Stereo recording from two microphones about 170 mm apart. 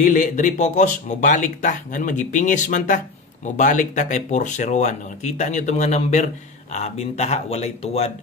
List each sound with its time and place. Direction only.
0.0 s speech: 50° left (ahead or behind)